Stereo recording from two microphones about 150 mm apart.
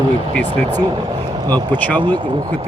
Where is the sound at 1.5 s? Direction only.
30° right (ahead or behind).